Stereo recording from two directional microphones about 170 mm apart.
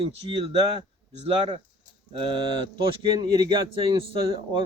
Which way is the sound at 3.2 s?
25° right (ahead or behind).